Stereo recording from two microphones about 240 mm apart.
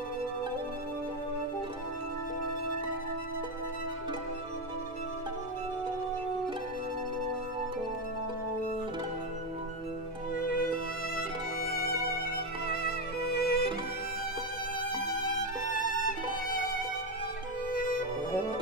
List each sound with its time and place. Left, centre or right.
10.4 s music: left
17.7 s music: left